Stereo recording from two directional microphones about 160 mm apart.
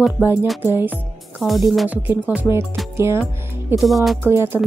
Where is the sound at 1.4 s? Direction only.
Centre (ahead or behind); by 3.3 s 15° right (ahead or behind).